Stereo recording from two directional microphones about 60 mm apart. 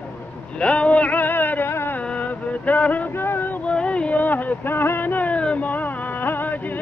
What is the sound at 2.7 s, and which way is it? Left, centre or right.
Music, left.